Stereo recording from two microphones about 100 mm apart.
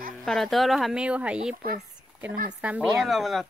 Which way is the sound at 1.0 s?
15° right (ahead or behind).